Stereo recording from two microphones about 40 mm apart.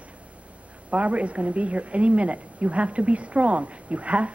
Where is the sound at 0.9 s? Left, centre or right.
Right.